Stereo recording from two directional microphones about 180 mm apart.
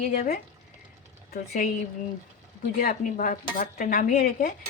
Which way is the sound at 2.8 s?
50° left (ahead or behind).